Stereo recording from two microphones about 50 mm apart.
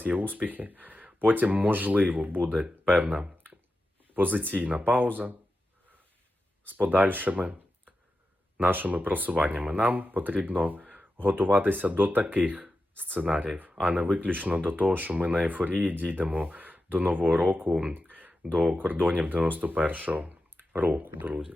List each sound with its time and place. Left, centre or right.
0.0 s speech: right
6.7 s speech: right
8.5 s speech: right
17.7 s speech: right
17.9 s a sound: right
18.8 s speech: right